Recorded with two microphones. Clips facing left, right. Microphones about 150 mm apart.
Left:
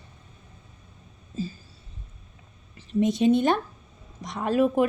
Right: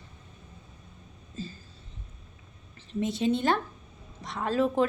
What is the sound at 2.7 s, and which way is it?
A woman's voice, 15° left (ahead or behind).